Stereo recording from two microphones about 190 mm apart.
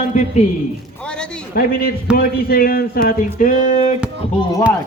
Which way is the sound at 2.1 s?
50° left (ahead or behind).